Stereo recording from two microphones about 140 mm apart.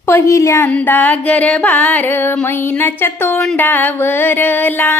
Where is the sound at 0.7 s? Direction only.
10° left (ahead or behind).